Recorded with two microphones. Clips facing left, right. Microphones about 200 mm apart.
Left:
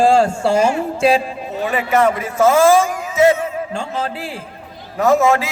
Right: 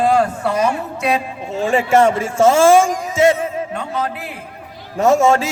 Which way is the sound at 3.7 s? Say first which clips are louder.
Even; 30° left (ahead or behind).